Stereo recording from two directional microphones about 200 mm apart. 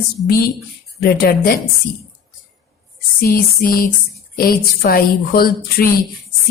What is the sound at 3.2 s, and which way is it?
A woman's voice, 45° left (ahead or behind).